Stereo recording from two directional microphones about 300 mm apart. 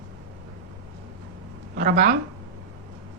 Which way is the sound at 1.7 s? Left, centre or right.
Right.